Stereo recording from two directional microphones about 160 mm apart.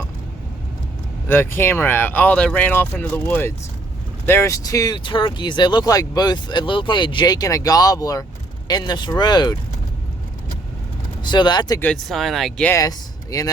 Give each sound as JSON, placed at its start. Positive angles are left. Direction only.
{"t": 1.3, "sound": "speech", "side_deg": 15}
{"t": 11.2, "sound": "speech", "side_deg": 30}
{"t": 11.8, "sound": "speech", "side_deg": 5}
{"t": 13.3, "sound": "speech", "side_deg": 20}